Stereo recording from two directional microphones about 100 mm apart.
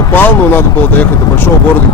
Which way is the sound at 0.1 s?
20° left (ahead or behind).